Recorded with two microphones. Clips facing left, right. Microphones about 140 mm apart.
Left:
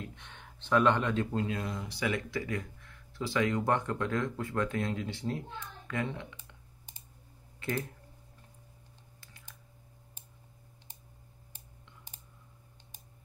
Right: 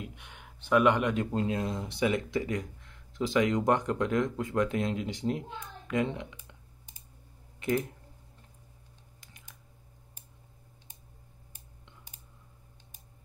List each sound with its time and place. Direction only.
0.0 s speech: 10° right (ahead or behind)
7.6 s speech: 20° right (ahead or behind)